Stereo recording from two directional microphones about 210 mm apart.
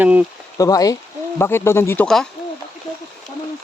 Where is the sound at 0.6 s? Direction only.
15° left (ahead or behind).